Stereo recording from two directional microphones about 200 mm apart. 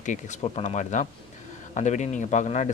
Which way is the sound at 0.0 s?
35° left (ahead or behind).